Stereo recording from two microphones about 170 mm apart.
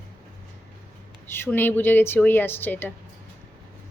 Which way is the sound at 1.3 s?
10° left (ahead or behind).